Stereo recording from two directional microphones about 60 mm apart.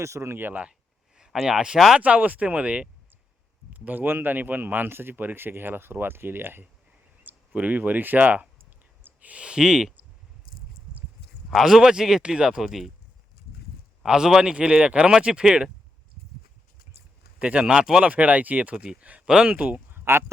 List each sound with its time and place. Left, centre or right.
0.0 s speech: right
0.3 s speech: right
1.1 s speech: centre
2.0 s speech: right
7.3 s speech: right; by 9.9 s centre
11.5 s speech: centre
14.0 s speech: centre
17.4 s speech: centre
18.0 s speech: right
19.9 s a sound: right